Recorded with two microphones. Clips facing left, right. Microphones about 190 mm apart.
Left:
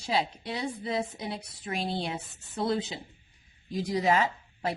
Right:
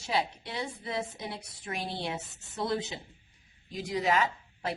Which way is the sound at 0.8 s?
25° left (ahead or behind).